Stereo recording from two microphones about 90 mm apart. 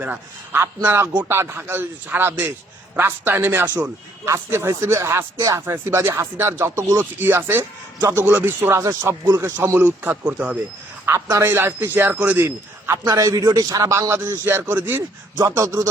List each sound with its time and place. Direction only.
0.0 s speech: 20° right (ahead or behind)
5.4 s a man's voice: 40° right (ahead or behind)
5.6 s speech: 25° right (ahead or behind)
8.8 s speech: 45° right (ahead or behind)
9.0 s speech: 30° right (ahead or behind)
9.8 s speech: 20° right (ahead or behind)
11.0 s speech: 30° right (ahead or behind)
12.5 s a man's voice: 30° right (ahead or behind)
13.1 s a man's voice: 40° right (ahead or behind)
14.3 s speech: 25° right (ahead or behind)
15.4 s a man's voice: 35° right (ahead or behind)